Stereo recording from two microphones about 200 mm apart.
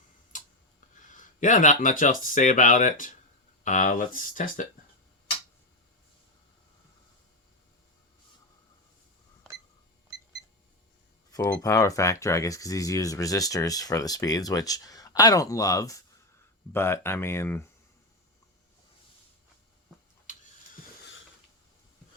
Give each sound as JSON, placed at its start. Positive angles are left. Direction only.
{"t": 0.3, "sound": "tick-tock", "side_deg": 40}
{"t": 1.1, "sound": "speech", "side_deg": 40}
{"t": 11.3, "sound": "speech", "side_deg": 15}
{"t": 21.0, "sound": "a sound", "side_deg": 70}